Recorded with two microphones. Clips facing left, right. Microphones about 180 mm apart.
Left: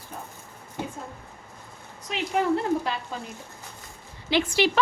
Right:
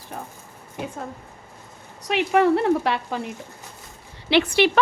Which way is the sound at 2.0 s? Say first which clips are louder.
Right 6 dB; 70° right (ahead or behind).